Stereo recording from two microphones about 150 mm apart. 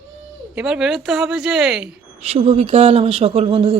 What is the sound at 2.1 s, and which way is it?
A man's voice, 40° right (ahead or behind).